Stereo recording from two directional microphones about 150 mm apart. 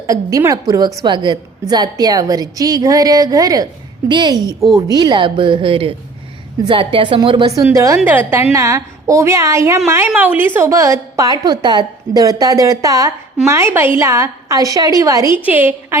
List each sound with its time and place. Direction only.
0.1 s a woman's voice: 20° right (ahead or behind)